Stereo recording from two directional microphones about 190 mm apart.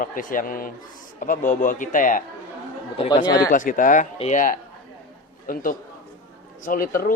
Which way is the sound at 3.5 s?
45° left (ahead or behind).